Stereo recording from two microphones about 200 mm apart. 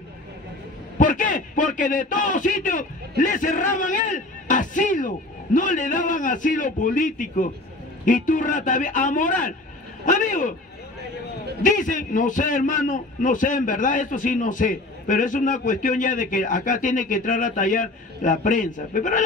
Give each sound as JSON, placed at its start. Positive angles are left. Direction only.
{"t": 0.9, "sound": "a man's voice", "side_deg": 40}
{"t": 10.0, "sound": "a sound", "side_deg": 40}
{"t": 11.6, "sound": "a man's voice", "side_deg": 40}